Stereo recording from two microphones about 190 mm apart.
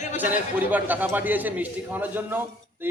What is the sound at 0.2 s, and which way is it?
A man's voice, 10° right (ahead or behind).